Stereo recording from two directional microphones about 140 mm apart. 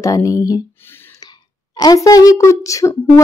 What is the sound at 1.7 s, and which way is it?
Speech, 25° left (ahead or behind).